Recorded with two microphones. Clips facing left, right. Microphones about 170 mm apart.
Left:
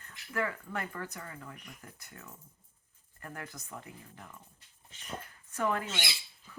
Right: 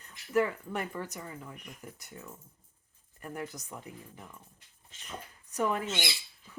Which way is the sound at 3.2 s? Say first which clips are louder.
Right 5 dB; 15° right (ahead or behind).